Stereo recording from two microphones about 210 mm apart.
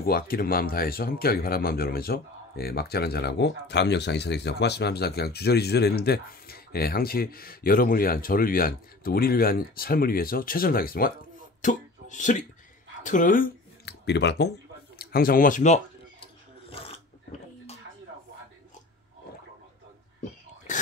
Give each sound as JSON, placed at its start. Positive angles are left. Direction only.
{"t": 0.0, "sound": "speech", "side_deg": 45}
{"t": 16.6, "sound": "sneeze", "side_deg": 25}
{"t": 20.2, "sound": "a sound", "side_deg": 35}